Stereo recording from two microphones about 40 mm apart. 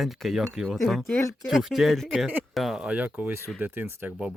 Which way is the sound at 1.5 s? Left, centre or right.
Centre.